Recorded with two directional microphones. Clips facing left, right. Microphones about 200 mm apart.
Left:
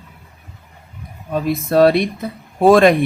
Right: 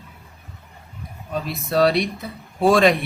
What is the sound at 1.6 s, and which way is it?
Speech, 50° left (ahead or behind).